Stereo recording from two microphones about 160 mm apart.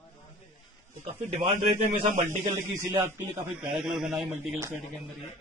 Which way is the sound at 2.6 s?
15° right (ahead or behind).